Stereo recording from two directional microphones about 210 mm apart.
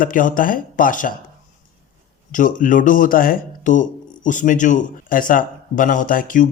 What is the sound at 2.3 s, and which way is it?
Speech, 40° left (ahead or behind).